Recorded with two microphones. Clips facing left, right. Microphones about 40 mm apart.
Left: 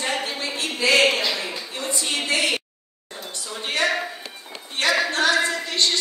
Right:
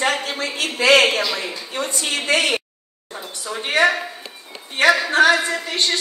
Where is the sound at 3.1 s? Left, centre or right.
Right.